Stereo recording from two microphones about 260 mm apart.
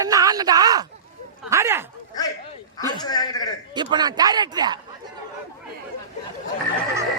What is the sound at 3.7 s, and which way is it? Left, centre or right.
Speech, centre.